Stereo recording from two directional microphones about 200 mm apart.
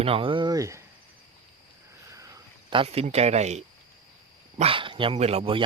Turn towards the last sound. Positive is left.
turn(degrees=-25)  # may be behind; listen again after turning